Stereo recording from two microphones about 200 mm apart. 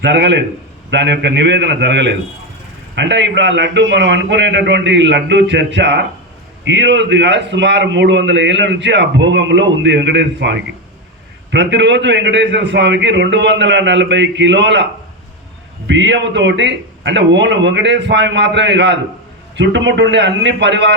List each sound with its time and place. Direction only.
0.0 s a man's voice: 60° right (ahead or behind)
15.9 s a man's voice: 65° right (ahead or behind)